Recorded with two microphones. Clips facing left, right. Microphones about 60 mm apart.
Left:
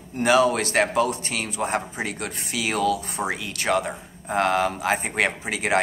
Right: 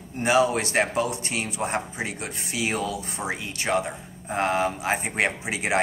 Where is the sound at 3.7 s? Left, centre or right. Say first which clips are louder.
Left 2 dB; left.